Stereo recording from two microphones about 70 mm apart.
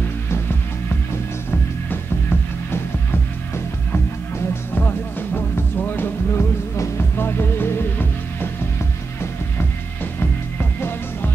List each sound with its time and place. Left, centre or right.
1.5 s music: left
10.6 s music: left